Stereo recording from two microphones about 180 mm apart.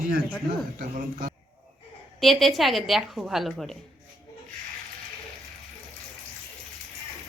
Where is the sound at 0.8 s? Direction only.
55° right (ahead or behind).